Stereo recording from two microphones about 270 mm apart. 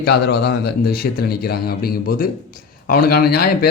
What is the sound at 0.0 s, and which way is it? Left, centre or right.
Speech, left.